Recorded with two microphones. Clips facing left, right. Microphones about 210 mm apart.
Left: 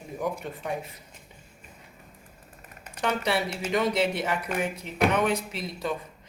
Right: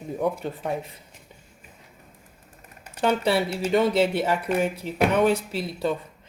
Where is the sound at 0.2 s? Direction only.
30° right (ahead or behind).